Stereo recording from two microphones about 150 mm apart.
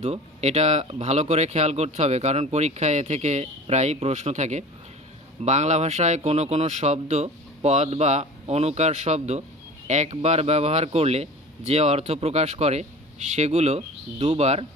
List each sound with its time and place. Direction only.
0.0 s speech: 45° right (ahead or behind)